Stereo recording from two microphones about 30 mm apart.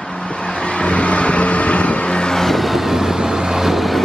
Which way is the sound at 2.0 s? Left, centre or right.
Left.